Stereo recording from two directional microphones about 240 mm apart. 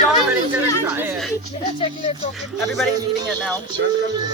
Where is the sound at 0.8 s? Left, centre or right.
Centre.